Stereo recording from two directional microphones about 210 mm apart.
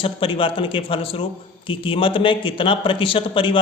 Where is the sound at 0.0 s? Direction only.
25° left (ahead or behind).